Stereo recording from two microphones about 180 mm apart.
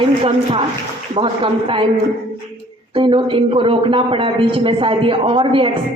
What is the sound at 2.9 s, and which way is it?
Speech, 30° right (ahead or behind).